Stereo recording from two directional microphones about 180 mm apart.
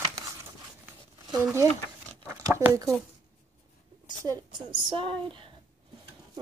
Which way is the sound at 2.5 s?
15° right (ahead or behind).